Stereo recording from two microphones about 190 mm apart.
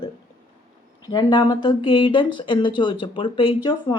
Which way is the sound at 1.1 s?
25° left (ahead or behind).